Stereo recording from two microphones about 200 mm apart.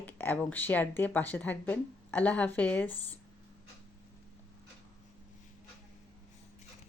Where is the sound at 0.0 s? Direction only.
10° left (ahead or behind).